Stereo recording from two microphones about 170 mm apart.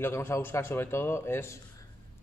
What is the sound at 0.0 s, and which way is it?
Speech, 15° left (ahead or behind).